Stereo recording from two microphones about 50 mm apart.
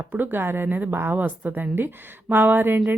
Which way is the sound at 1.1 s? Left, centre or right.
Right.